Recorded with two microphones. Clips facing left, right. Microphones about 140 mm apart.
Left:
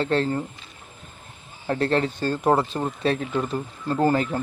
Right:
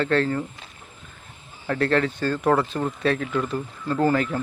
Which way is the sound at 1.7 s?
25° left (ahead or behind).